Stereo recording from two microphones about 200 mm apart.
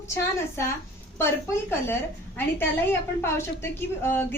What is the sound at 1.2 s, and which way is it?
A woman's voice, 10° left (ahead or behind).